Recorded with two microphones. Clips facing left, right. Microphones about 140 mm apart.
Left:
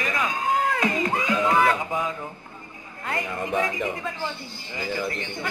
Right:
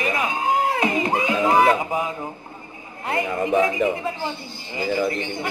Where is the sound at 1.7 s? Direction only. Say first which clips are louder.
Right 4 dB; 15° right (ahead or behind).